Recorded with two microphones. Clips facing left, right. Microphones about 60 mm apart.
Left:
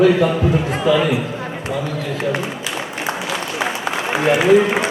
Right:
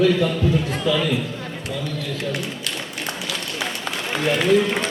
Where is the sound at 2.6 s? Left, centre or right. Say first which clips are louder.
Left 5 dB; centre.